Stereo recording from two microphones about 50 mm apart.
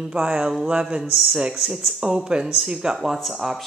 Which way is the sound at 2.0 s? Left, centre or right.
Centre.